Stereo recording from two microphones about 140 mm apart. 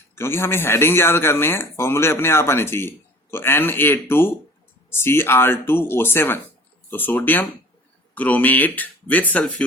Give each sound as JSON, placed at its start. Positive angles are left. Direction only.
{"t": 0.2, "sound": "speech", "side_deg": 15}